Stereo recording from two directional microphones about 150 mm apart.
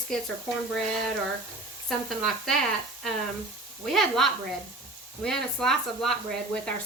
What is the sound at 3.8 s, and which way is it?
Speech, centre (ahead or behind).